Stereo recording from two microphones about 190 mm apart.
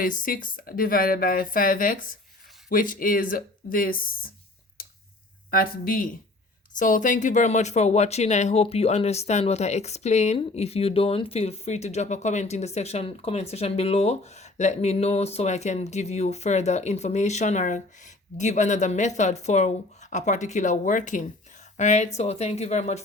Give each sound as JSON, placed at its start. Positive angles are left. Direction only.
{"t": 0.0, "sound": "speech", "side_deg": 45}
{"t": 4.8, "sound": "a sound", "side_deg": 50}
{"t": 5.5, "sound": "speech", "side_deg": 50}